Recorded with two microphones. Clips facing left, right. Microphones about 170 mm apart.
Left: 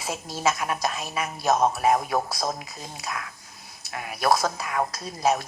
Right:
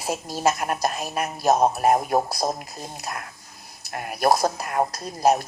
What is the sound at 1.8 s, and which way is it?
Speech, 50° right (ahead or behind).